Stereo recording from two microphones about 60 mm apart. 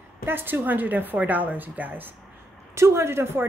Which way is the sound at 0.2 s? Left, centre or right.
Right.